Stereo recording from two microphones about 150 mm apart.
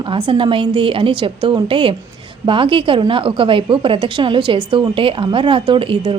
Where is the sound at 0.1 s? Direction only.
35° right (ahead or behind).